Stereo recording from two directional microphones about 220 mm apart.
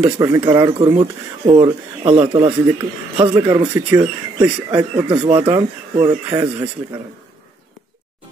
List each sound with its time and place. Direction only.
0.0 s speech: 15° right (ahead or behind)
4.9 s speech: 25° right (ahead or behind)